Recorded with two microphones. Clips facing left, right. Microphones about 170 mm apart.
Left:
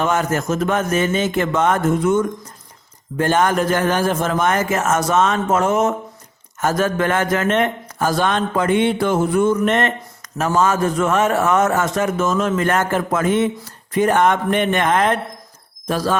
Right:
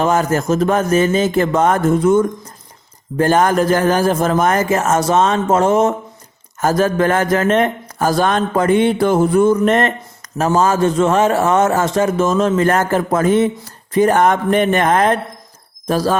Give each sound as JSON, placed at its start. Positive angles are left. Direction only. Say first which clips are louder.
{"t": 0.0, "sound": "a man's voice", "louder": "right 4 dB", "side_deg": -35}